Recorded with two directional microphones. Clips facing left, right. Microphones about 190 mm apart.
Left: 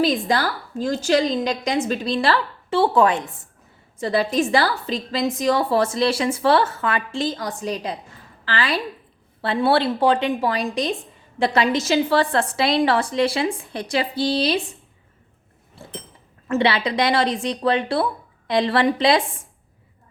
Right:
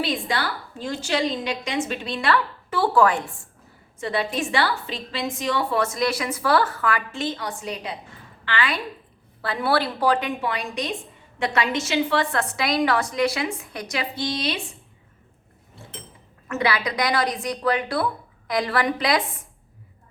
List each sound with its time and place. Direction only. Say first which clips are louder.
0.0 s a woman's voice: left 6 dB; 40° left (ahead or behind); by 3.5 s 20° left (ahead or behind)
4.0 s a woman's voice: left 5 dB; 35° left (ahead or behind)
16.5 s speech: left 4 dB; 30° left (ahead or behind)